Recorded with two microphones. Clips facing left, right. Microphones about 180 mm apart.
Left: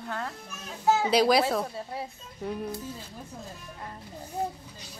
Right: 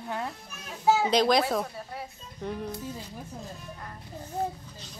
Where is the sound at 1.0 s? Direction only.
5° left (ahead or behind).